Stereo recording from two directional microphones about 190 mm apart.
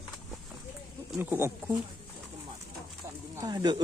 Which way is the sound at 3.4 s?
20° right (ahead or behind).